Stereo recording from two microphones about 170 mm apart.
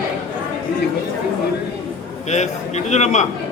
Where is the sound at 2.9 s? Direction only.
40° left (ahead or behind).